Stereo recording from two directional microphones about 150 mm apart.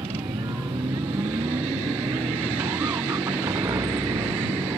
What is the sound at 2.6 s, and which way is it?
Music, 25° right (ahead or behind).